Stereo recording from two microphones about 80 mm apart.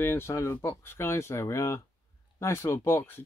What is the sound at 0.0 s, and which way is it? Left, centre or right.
Speech, left.